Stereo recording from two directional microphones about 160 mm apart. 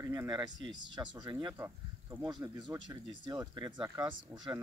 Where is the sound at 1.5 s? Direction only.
15° right (ahead or behind).